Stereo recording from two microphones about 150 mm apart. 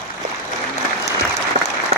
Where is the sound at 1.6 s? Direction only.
60° right (ahead or behind).